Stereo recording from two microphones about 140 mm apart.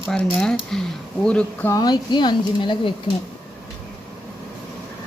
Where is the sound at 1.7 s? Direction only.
25° left (ahead or behind).